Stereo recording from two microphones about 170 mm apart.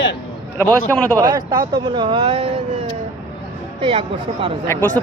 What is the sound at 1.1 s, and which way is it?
A man's voice, 20° right (ahead or behind).